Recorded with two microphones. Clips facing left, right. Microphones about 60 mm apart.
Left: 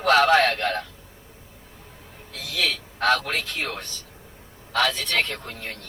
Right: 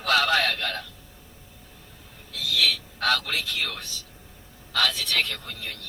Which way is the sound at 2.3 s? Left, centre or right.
Left.